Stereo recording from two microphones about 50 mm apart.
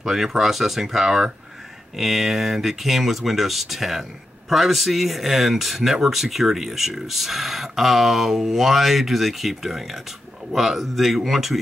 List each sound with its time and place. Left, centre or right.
0.0 s speech: centre